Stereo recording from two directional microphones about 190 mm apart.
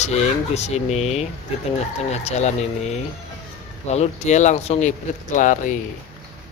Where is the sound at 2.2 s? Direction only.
35° left (ahead or behind).